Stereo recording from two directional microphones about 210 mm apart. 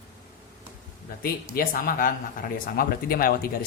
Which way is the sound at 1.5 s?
40° left (ahead or behind).